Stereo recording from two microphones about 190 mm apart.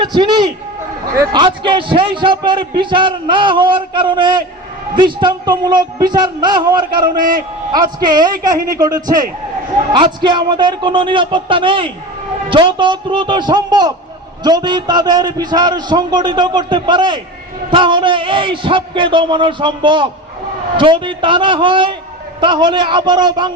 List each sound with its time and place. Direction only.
0.0 s a man's voice: 25° right (ahead or behind)